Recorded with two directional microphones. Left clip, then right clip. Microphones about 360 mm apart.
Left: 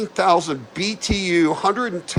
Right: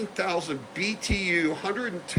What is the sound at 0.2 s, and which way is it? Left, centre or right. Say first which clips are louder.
Speech: left 12 dB; centre.